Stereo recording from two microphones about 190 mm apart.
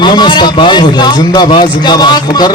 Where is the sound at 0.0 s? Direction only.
25° left (ahead or behind).